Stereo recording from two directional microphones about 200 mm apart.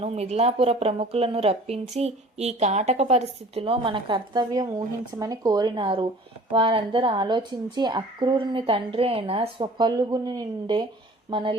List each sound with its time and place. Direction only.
0.0 s speech: 30° right (ahead or behind)